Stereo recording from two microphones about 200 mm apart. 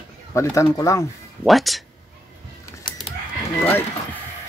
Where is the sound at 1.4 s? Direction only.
Centre (ahead or behind).